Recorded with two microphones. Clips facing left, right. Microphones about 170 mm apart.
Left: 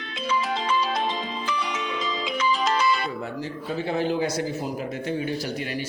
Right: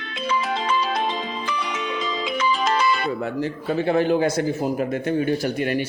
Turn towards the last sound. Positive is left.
turn(degrees=-55)  # may be behind; listen again after turning